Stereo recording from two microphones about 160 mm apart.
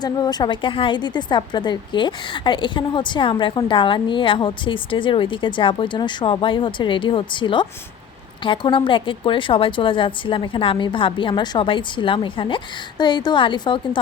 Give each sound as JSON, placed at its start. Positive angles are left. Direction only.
{"t": 0.0, "sound": "a woman's voice", "side_deg": 25}